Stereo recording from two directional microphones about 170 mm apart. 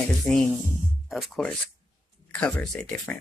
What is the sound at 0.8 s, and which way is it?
Music, centre (ahead or behind).